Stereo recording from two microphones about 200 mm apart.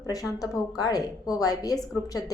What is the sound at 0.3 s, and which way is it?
A woman's voice, 20° left (ahead or behind).